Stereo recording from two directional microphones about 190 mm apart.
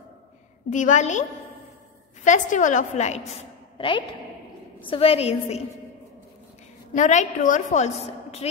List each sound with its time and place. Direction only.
0.7 s a woman's voice: 40° left (ahead or behind)
2.2 s a woman's voice: 40° left (ahead or behind)
3.7 s a woman's voice: 25° left (ahead or behind)
7.0 s a woman's voice: 40° left (ahead or behind)